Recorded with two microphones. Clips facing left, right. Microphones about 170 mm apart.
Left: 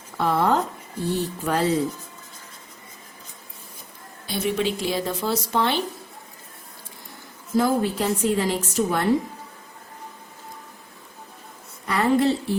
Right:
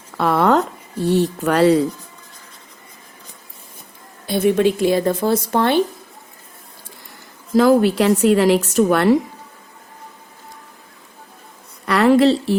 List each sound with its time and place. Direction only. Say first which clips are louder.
0.2 s a woman's voice: right 5 dB; 70° right (ahead or behind)
4.3 s speech: right 9 dB; 55° right (ahead or behind)
7.5 s a woman's voice: right 8 dB; 85° right
11.9 s a sound: right 7 dB; 75° right (ahead or behind)